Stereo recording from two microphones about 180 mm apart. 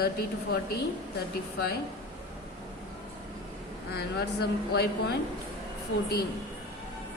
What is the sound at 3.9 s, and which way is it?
Speech, 60° left (ahead or behind).